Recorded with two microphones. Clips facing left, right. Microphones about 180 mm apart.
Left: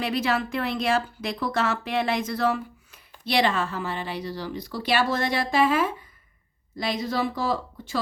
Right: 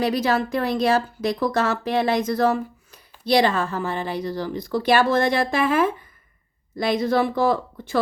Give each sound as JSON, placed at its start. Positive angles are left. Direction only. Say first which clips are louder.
{"t": 0.0, "sound": "a woman's voice", "louder": "right 4 dB", "side_deg": -40}